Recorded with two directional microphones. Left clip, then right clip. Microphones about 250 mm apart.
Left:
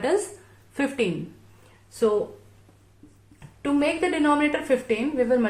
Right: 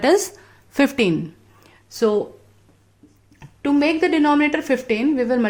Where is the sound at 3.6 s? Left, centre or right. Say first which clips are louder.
Right 5 dB; right.